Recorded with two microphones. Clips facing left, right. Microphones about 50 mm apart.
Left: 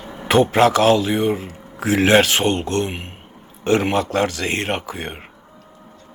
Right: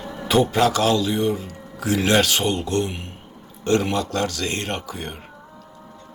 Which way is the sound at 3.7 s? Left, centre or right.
Left.